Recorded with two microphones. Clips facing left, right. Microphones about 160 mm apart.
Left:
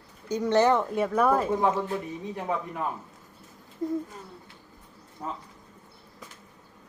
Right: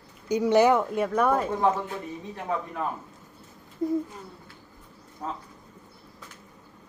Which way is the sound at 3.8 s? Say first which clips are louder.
Right 3 dB; 10° right (ahead or behind).